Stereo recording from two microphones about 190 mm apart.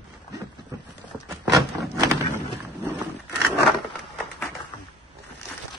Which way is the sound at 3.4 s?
Centre (ahead or behind).